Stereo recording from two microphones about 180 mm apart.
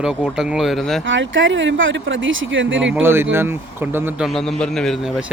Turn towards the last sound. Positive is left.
turn(degrees=0)  # may be behind; listen again after turning